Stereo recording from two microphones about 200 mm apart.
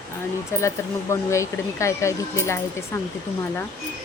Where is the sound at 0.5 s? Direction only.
15° left (ahead or behind).